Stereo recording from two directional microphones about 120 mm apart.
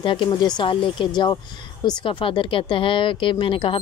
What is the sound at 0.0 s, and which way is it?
A woman's voice, 45° left (ahead or behind).